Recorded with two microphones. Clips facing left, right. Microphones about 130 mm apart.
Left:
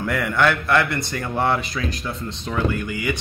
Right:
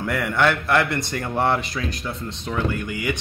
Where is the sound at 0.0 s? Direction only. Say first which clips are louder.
Left 1 dB; 5° right (ahead or behind).